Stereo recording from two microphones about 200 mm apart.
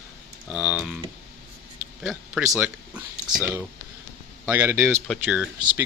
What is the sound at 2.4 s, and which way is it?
Speech, centre (ahead or behind).